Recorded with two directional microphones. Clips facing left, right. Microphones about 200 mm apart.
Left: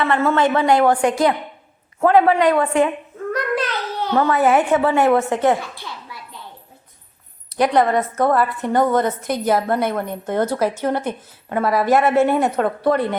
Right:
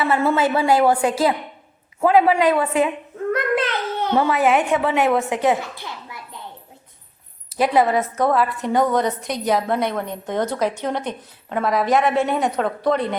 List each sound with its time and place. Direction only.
0.0 s a woman's voice: 10° right (ahead or behind)
2.0 s a woman's voice: 10° right (ahead or behind)
3.3 s a sound: 20° right (ahead or behind)
4.3 s a woman's voice: centre (ahead or behind)
7.5 s a woman's voice: centre (ahead or behind)